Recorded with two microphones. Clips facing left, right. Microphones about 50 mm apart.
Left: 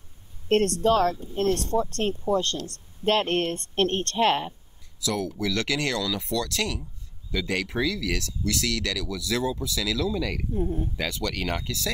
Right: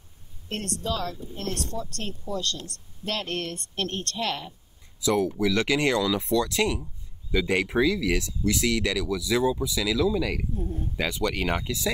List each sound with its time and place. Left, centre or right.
0.5 s speech: left
5.0 s speech: centre
10.5 s speech: left
11.0 s speech: centre